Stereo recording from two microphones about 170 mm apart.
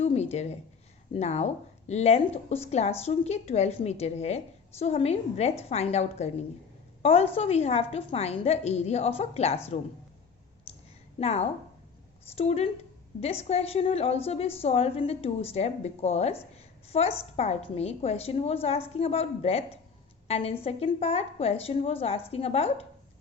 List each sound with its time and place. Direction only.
0.0 s a sound: 40° left (ahead or behind)
1.1 s a woman's voice: 40° left (ahead or behind)
11.2 s a woman's voice: 40° left (ahead or behind)